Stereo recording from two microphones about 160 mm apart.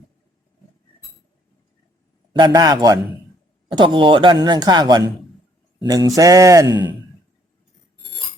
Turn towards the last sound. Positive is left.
turn(degrees=-25)  # may be behind; listen again after turning